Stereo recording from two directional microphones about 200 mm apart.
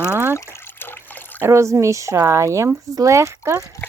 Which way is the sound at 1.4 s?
15° right (ahead or behind).